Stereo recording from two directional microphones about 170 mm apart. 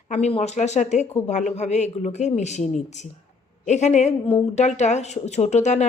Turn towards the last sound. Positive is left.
turn(degrees=45)  # may be behind; listen again after turning